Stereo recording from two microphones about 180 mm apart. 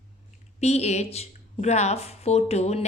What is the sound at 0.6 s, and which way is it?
Speech, 35° left (ahead or behind).